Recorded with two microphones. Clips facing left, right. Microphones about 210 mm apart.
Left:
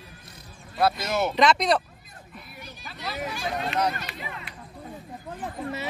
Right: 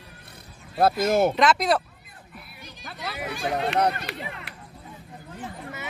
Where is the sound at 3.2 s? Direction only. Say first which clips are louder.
Right 4 dB; 65° right (ahead or behind).